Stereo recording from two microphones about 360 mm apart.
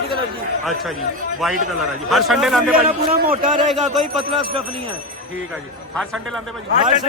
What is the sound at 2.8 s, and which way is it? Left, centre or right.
Speech, right.